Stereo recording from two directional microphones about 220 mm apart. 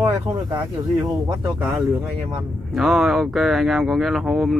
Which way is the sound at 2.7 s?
Centre (ahead or behind).